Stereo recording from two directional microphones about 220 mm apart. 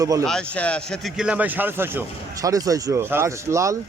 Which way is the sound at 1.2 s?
5° right (ahead or behind).